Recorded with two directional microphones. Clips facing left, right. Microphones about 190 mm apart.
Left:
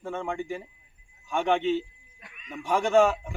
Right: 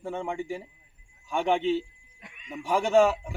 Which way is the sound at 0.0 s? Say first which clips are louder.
Even; 10° right (ahead or behind).